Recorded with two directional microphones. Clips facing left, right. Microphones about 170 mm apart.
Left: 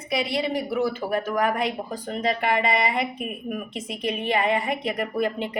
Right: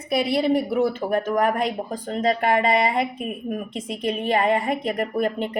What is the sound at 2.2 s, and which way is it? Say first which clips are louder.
A woman's voice: right 3 dB; 45° right (ahead or behind).